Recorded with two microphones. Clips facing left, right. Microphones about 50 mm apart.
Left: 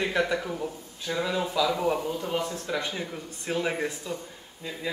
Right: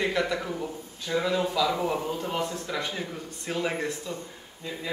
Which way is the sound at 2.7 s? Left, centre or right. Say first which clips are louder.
Left 1 dB; centre.